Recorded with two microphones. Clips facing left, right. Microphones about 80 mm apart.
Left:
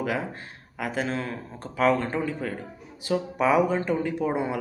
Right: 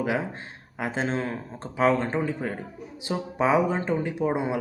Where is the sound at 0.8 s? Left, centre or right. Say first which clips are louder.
Right 1 dB; right.